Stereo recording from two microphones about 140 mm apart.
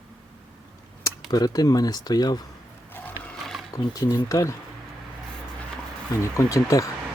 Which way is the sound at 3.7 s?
25° left (ahead or behind).